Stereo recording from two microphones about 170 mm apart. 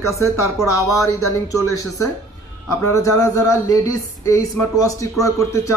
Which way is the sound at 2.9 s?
20° left (ahead or behind).